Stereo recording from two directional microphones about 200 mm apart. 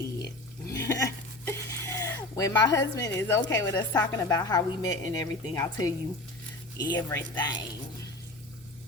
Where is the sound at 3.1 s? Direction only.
15° left (ahead or behind).